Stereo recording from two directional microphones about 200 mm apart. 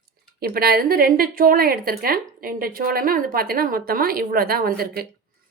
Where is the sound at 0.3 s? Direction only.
50° right (ahead or behind).